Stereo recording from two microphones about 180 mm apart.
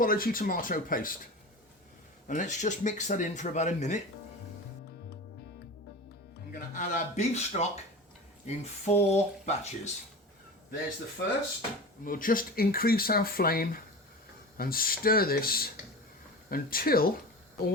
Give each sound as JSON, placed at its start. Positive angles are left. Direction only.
{"t": 0.0, "sound": "speech", "side_deg": 55}
{"t": 2.2, "sound": "speech", "side_deg": 45}
{"t": 6.5, "sound": "speech", "side_deg": 45}
{"t": 12.0, "sound": "speech", "side_deg": 50}